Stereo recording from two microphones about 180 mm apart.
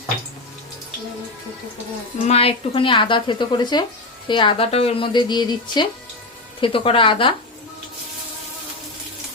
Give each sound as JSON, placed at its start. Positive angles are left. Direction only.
{"t": 2.2, "sound": "a woman's voice", "side_deg": 35}